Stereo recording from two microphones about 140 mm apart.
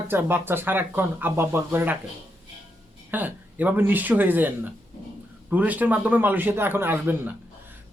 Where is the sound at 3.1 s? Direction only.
10° right (ahead or behind).